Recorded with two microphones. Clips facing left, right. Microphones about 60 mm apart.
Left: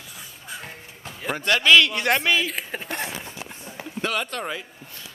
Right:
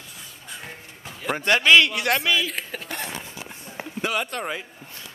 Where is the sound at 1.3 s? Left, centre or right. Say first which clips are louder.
Right 1 dB; right.